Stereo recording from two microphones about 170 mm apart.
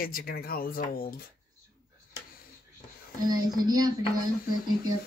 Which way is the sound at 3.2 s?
20° right (ahead or behind).